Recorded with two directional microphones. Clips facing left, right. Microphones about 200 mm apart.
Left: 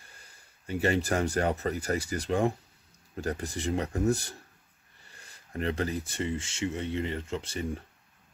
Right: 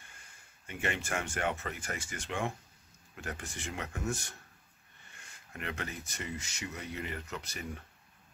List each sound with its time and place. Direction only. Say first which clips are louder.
0.0 s speech: left 2 dB; 35° left (ahead or behind)